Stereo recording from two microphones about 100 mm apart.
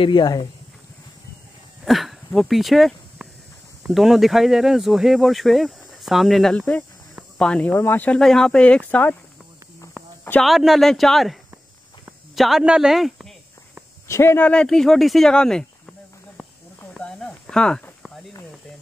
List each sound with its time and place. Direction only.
0.0 s speech: 45° left (ahead or behind)
1.9 s speech: centre (ahead or behind); by 8.2 s 20° left (ahead or behind)
8.2 s speech: 5° left (ahead or behind)
10.4 s speech: centre (ahead or behind)
12.4 s speech: 5° right (ahead or behind)
14.0 s speech: 25° left (ahead or behind)
14.5 s speech: 5° left (ahead or behind)
16.9 s a sound: 5° left (ahead or behind)
17.5 s speech: 10° left (ahead or behind)